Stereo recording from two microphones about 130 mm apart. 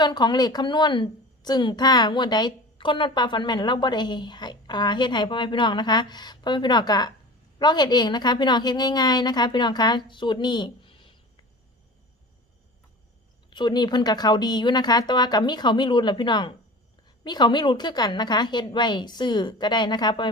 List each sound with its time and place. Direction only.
0.0 s a woman's voice: 35° left (ahead or behind)
13.5 s a woman's voice: 35° left (ahead or behind)